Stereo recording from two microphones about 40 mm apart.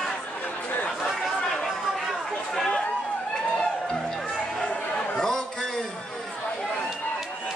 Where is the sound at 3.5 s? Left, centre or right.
Centre.